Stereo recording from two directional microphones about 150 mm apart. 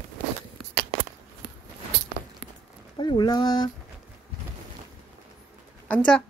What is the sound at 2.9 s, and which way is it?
Speech, 30° left (ahead or behind).